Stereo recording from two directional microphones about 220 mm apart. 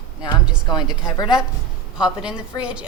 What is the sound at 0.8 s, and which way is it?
A woman's voice, 5° right (ahead or behind).